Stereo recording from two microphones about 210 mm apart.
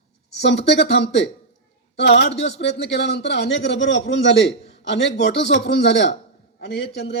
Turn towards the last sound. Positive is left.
turn(degrees=55)  # may be behind; listen again after turning